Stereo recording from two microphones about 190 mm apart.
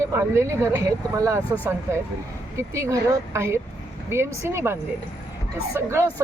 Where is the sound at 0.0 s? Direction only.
15° right (ahead or behind).